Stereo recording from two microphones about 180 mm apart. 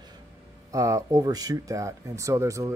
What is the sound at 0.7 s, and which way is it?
Speech, 20° right (ahead or behind).